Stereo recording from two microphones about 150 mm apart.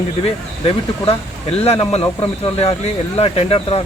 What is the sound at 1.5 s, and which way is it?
Speech, 45° left (ahead or behind).